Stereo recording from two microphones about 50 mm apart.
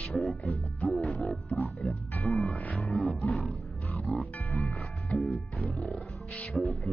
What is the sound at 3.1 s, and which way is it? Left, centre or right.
Wild animals, left.